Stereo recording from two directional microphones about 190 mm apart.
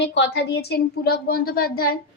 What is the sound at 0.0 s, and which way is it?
Speech, 70° left (ahead or behind).